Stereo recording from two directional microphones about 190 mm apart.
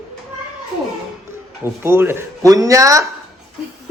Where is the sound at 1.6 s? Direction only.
10° right (ahead or behind).